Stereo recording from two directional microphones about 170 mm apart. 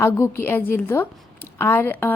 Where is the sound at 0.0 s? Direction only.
15° left (ahead or behind).